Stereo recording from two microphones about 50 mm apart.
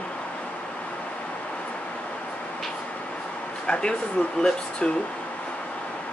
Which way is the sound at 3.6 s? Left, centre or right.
Centre.